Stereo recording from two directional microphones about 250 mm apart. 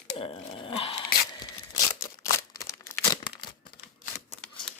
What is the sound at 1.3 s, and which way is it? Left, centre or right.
Crumpling, centre.